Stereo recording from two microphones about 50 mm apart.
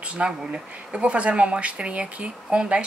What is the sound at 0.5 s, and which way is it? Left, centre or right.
Speech, right.